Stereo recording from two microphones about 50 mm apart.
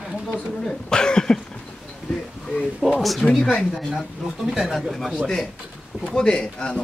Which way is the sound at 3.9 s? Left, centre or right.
Centre.